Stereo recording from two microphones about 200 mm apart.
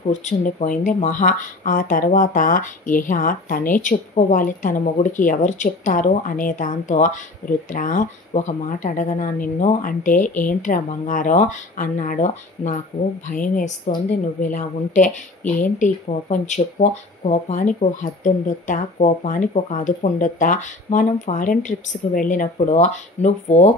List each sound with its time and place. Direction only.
0.0 s speech: 35° left (ahead or behind)